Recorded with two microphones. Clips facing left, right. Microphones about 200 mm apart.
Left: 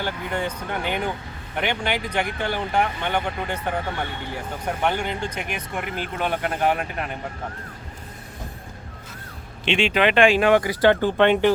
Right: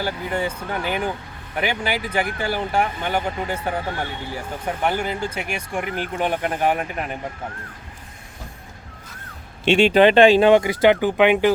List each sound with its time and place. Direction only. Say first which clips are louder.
0.0 s speech: right 2 dB; 5° right (ahead or behind)
9.6 s speech: right 6 dB; 40° right (ahead or behind); by 11.5 s 10° right (ahead or behind)